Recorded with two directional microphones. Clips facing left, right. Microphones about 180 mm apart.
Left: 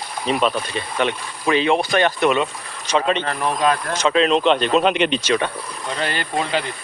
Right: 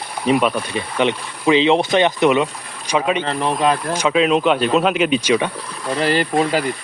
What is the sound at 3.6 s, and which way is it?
Speech, 10° right (ahead or behind).